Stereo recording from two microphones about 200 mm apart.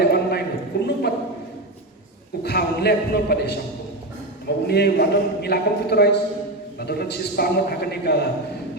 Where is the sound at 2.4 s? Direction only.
55° left (ahead or behind).